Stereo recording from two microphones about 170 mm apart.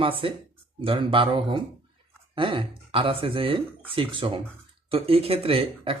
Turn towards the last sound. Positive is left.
turn(degrees=-35)  # may be behind; listen again after turning